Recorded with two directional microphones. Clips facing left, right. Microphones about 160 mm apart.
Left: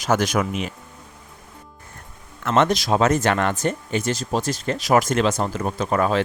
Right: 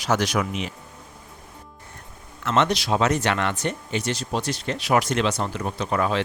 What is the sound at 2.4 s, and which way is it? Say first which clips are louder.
Speech: left 3 dB; 50° left (ahead or behind).